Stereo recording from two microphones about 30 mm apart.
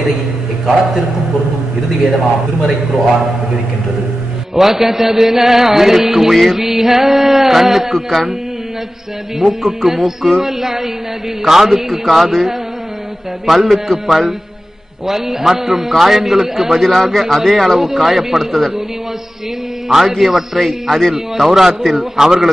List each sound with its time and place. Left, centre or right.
4.6 s mantra: centre
9.4 s mantra: centre
16.8 s speech: centre
17.8 s mantra: centre
19.9 s mantra: centre